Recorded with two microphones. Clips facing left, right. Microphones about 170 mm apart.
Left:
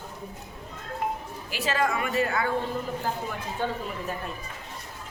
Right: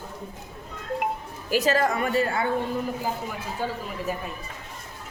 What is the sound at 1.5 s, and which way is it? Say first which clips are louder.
Speech: right 5 dB; 40° right (ahead or behind).